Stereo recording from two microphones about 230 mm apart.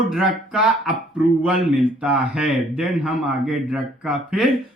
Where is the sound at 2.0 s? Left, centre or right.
Centre.